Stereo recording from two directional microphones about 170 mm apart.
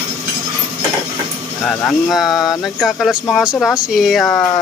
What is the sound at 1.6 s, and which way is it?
Speech, 5° left (ahead or behind).